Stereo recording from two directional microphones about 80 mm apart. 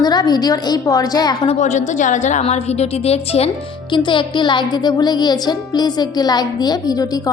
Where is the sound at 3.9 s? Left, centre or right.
Left.